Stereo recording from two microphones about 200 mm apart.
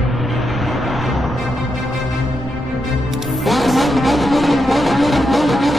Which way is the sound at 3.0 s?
Centre (ahead or behind).